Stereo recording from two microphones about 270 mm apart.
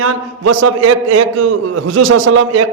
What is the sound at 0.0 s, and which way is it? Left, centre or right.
A man's voice, right.